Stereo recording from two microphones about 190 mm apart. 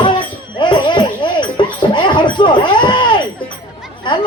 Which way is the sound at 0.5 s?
25° left (ahead or behind).